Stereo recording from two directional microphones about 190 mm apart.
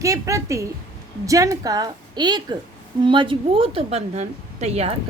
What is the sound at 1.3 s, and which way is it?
A woman's voice, 15° right (ahead or behind).